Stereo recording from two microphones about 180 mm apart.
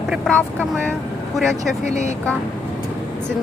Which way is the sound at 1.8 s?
40° left (ahead or behind).